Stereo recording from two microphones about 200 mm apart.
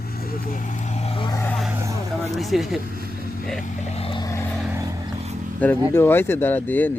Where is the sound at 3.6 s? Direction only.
35° left (ahead or behind).